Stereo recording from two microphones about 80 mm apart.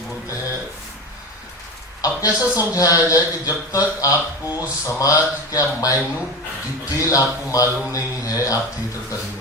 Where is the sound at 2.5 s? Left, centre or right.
Left.